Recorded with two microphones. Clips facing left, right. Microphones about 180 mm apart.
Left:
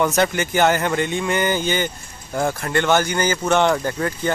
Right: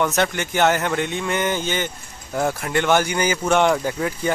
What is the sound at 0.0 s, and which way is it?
Speech, centre (ahead or behind).